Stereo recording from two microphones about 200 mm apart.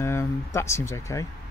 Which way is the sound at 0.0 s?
15° left (ahead or behind).